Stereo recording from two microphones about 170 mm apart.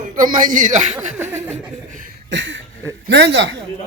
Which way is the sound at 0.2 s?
50° right (ahead or behind).